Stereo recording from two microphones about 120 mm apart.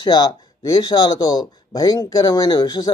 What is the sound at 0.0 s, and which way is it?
Speech, 40° left (ahead or behind).